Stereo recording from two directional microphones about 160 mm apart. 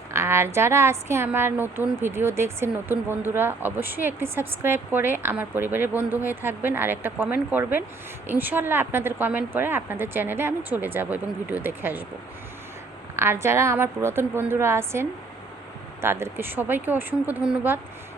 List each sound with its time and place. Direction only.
0.1 s a woman's voice: 15° right (ahead or behind)
13.1 s a woman's voice: 15° right (ahead or behind)